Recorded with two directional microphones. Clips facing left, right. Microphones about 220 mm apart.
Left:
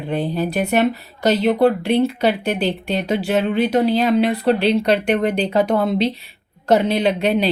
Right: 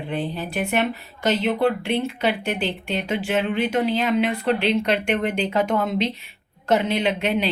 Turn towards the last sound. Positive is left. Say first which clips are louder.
# left 5 dB
turn(degrees=35)  # may be behind; listen again after turning